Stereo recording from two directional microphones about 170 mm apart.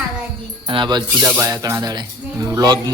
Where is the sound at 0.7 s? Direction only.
30° right (ahead or behind).